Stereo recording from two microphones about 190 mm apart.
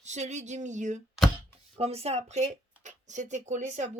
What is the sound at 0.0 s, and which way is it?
Speech, 35° right (ahead or behind).